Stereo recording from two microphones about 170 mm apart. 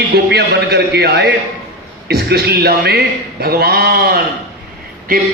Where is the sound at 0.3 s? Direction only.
75° right (ahead or behind).